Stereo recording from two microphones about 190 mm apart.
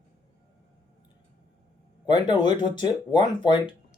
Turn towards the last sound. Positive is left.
turn(degrees=25)  # may be behind; listen again after turning